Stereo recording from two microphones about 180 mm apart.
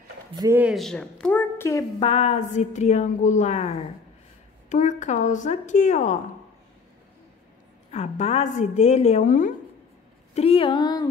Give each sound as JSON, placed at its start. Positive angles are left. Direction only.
{"t": 0.5, "sound": "a woman's voice", "side_deg": -5}
{"t": 2.0, "sound": "a woman's voice", "side_deg": 35}
{"t": 7.9, "sound": "a woman's voice", "side_deg": 40}
{"t": 10.3, "sound": "speech", "side_deg": 35}